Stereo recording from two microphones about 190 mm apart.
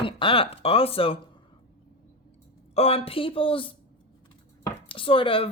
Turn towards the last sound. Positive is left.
turn(degrees=30)  # may be behind; listen again after turning